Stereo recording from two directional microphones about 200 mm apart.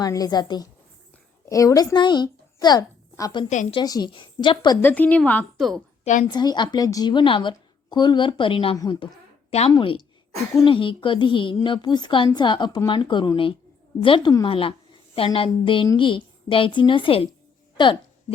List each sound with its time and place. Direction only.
0.0 s a woman's voice: 20° left (ahead or behind)
3.5 s a woman's voice: 35° left (ahead or behind)
3.8 s a woman's voice: 20° left (ahead or behind)
4.8 s a woman's voice: 10° left (ahead or behind)
6.2 s a woman's voice: 20° left (ahead or behind)